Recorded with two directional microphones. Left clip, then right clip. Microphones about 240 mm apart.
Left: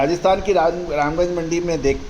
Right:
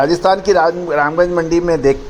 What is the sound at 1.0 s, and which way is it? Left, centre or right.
Speech, right.